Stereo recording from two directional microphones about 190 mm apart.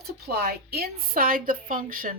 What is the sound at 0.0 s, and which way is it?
Speech, 55° right (ahead or behind).